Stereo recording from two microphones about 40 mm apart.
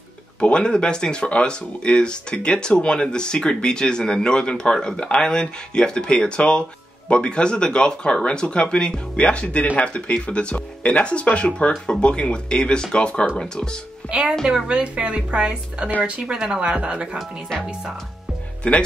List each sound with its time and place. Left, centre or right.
0.4 s speech: left
14.0 s a woman's voice: left
14.7 s speech: right
18.6 s speech: left